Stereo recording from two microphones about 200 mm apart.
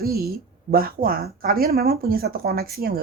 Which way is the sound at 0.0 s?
50° right (ahead or behind).